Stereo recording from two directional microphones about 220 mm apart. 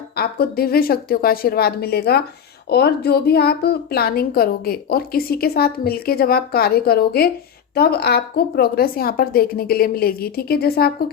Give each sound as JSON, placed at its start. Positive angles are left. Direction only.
{"t": 0.2, "sound": "a woman's voice", "side_deg": 45}